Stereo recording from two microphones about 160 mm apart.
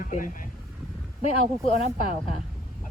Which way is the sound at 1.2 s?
40° left (ahead or behind).